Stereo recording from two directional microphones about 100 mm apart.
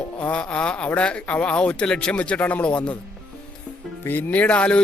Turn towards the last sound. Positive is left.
turn(degrees=10)  # may be behind; listen again after turning